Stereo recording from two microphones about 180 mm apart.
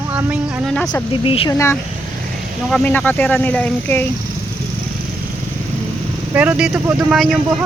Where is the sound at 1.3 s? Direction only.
30° left (ahead or behind).